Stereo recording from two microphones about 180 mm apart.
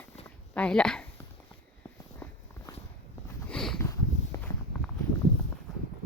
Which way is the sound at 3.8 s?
15° left (ahead or behind).